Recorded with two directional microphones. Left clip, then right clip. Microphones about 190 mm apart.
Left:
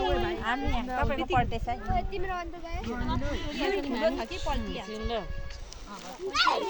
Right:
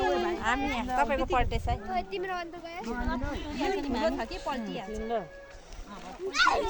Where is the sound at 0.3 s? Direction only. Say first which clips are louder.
Right 1 dB; 70° right (ahead or behind).